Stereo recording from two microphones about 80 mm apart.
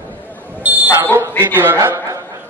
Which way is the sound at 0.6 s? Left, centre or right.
Right.